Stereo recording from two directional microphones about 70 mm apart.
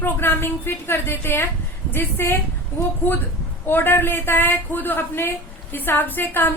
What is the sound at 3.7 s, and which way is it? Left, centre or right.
A woman's voice, left.